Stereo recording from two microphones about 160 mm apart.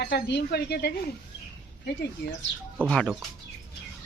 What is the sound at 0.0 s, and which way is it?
Speech, 90° left.